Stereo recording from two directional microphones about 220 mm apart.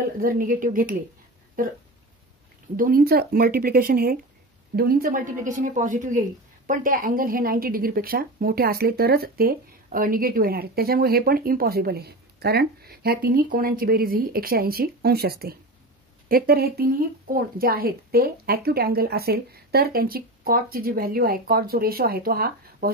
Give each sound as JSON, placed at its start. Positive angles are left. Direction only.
{"t": 0.2, "sound": "a woman's voice", "side_deg": -40}
{"t": 2.7, "sound": "a woman's voice", "side_deg": -40}